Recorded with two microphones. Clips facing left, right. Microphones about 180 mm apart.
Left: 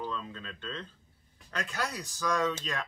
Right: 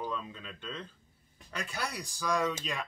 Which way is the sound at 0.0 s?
10° right (ahead or behind).